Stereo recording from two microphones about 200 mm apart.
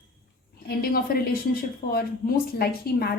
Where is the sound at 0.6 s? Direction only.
50° left (ahead or behind).